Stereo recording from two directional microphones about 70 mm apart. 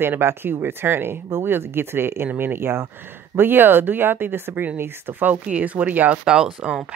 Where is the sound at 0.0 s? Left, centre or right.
Right.